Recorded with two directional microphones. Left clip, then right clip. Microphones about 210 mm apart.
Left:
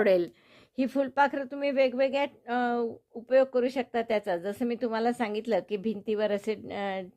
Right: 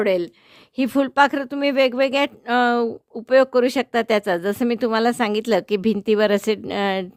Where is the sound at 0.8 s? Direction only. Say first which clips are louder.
Right 8 dB; 40° right (ahead or behind).